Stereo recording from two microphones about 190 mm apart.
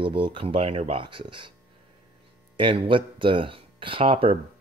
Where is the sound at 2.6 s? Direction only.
25° right (ahead or behind).